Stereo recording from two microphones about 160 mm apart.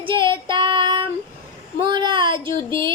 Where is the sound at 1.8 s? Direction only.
30° right (ahead or behind).